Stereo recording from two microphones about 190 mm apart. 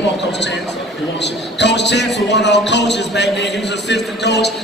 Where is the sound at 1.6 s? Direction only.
65° left (ahead or behind).